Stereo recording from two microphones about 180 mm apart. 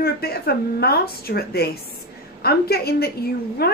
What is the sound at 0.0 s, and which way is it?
A woman's voice, 60° left (ahead or behind).